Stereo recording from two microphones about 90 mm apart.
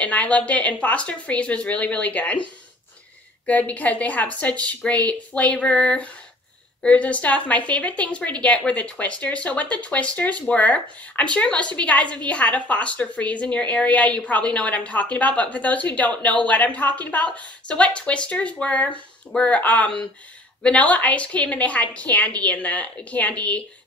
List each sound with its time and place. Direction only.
0.0 s a woman's voice: 15° left (ahead or behind)
3.4 s a woman's voice: 15° left (ahead or behind)